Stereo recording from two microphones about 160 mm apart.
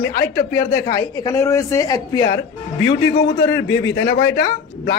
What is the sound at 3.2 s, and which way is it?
Speech, 90° left.